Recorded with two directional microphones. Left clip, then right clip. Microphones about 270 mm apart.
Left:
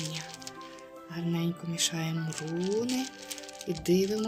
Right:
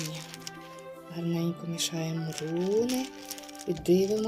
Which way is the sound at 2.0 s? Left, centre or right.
Centre.